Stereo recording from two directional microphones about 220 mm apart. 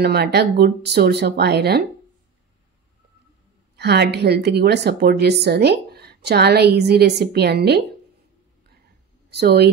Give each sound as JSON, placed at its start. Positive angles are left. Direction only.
{"t": 0.0, "sound": "a woman's voice", "side_deg": -45}
{"t": 3.7, "sound": "a woman's voice", "side_deg": -50}
{"t": 9.3, "sound": "a woman's voice", "side_deg": -45}